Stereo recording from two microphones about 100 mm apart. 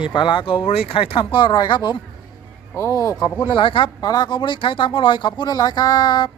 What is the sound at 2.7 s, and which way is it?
Speech, 30° left (ahead or behind).